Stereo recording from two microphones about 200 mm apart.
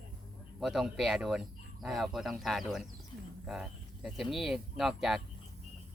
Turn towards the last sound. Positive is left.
turn(degrees=0)  # may be behind; listen again after turning